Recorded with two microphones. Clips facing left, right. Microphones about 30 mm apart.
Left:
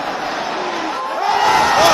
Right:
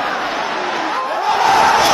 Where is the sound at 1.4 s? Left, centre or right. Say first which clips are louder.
Right 1 dB; centre.